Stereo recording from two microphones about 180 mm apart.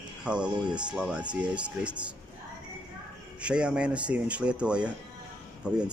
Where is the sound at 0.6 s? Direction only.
25° right (ahead or behind).